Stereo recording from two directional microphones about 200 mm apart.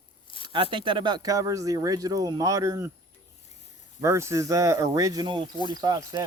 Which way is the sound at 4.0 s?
15° right (ahead or behind).